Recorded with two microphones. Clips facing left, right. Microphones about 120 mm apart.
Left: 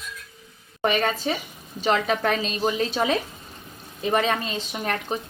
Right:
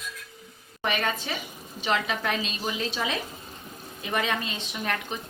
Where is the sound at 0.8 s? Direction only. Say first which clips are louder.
Left 5 dB; 35° left (ahead or behind).